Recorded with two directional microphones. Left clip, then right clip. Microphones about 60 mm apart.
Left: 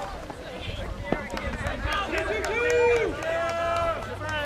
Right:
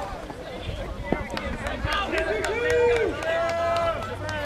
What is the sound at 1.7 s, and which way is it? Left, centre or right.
Run, centre.